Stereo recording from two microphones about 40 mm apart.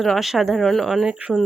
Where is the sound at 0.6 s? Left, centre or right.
Centre.